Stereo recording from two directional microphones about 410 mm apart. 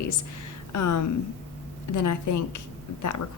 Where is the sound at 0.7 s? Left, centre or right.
Left.